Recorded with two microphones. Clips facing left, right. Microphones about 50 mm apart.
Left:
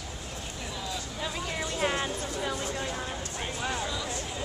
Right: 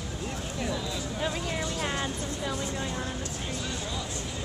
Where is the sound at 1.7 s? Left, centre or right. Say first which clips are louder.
Left 2 dB; centre.